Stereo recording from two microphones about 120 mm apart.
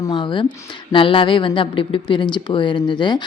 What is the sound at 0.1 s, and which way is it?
A woman's voice, 45° left (ahead or behind).